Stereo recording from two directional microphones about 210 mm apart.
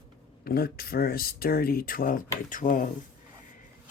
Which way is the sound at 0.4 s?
45° left (ahead or behind).